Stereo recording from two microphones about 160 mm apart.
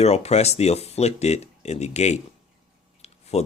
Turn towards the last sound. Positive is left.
turn(degrees=40)  # may be behind; listen again after turning